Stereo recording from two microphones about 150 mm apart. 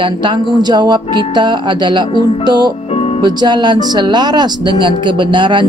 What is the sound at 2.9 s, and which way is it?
Music, 40° left (ahead or behind).